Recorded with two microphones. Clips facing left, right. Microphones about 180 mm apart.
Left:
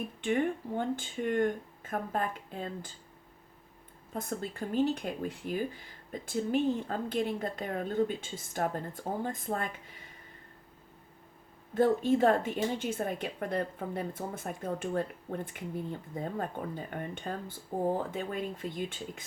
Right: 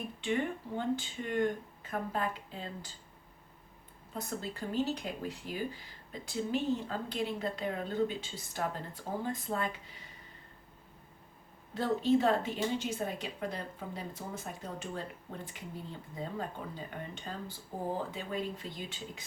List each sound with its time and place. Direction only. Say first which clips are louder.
0.2 s speech: left 4 dB; 50° left (ahead or behind)
4.1 s speech: left 3 dB; 50° left (ahead or behind)
11.7 s speech: left 3 dB; 50° left (ahead or behind)